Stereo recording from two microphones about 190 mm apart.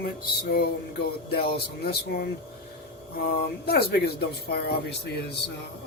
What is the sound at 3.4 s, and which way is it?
Speech, 55° left (ahead or behind).